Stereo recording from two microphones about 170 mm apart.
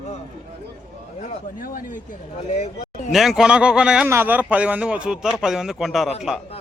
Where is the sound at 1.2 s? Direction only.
55° left (ahead or behind).